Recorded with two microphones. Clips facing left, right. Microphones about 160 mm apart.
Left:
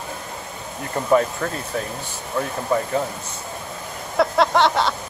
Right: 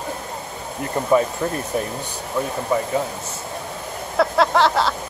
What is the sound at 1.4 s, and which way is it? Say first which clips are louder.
Speech: right 3 dB; 15° right (ahead or behind).